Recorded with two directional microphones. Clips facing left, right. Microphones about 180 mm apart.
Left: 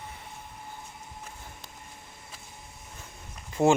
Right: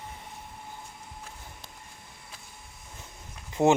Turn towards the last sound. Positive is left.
turn(degrees=-20)  # may be behind; listen again after turning